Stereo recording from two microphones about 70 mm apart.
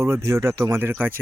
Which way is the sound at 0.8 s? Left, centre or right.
Right.